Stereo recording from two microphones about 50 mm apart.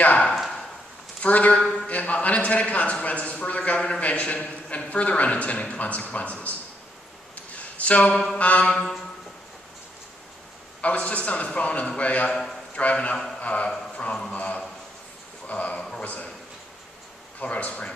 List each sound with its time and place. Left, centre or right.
0.0 s a sound: left
1.2 s a man's voice: left
7.7 s a man's voice: left
10.8 s a man's voice: left
12.3 s a man's voice: centre
12.7 s a man's voice: left
13.4 s a sound: left
13.9 s music: centre
14.3 s a man's voice: left
17.4 s a man's voice: left